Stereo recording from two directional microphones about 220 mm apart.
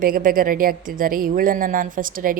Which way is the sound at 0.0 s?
40° right (ahead or behind).